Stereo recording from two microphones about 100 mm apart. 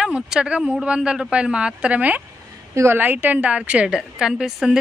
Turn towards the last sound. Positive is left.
turn(degrees=-5)  # may be behind; listen again after turning